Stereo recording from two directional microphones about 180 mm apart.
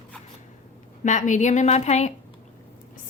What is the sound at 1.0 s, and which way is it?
A woman's voice, 40° left (ahead or behind).